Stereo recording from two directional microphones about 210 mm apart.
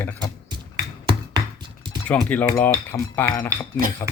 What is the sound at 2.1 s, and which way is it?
Speech, 5° left (ahead or behind).